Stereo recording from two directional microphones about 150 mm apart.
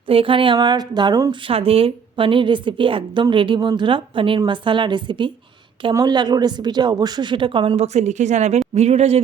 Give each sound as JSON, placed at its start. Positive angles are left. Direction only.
{"t": 0.1, "sound": "a woman's voice", "side_deg": -35}
{"t": 7.8, "sound": "speech", "side_deg": -50}